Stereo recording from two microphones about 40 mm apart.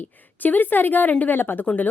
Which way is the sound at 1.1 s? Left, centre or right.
Left.